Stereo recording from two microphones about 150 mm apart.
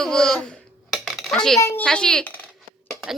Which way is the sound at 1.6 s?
10° left (ahead or behind).